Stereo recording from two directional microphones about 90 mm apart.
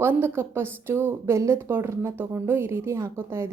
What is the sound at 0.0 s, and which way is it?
A woman's voice, 25° right (ahead or behind).